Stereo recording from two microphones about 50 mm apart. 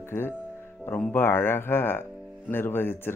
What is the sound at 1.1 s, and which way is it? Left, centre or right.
Speech, left.